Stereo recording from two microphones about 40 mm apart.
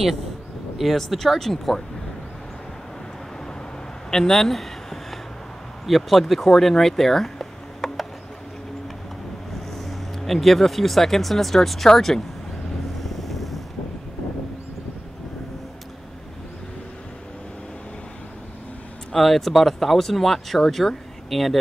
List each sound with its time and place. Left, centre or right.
0.7 s speech: centre
4.1 s a sound: centre
5.9 s speech: centre
9.5 s speech: centre
13.0 s boat: centre
19.1 s speech: centre